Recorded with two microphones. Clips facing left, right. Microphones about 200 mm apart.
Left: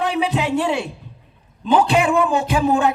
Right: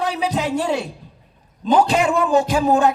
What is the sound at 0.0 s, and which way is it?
A man's voice, 40° right (ahead or behind).